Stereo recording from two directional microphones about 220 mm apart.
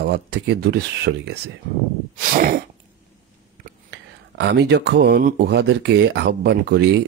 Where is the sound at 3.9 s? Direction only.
50° right (ahead or behind).